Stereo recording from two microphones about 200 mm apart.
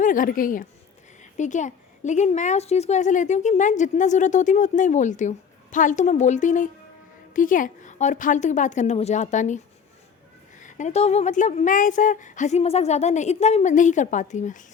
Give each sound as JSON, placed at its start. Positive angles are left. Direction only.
{"t": 0.0, "sound": "a woman's voice", "side_deg": 40}
{"t": 10.6, "sound": "a woman's voice", "side_deg": 40}